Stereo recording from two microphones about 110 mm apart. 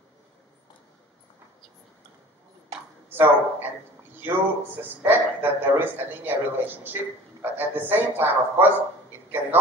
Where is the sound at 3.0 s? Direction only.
20° right (ahead or behind).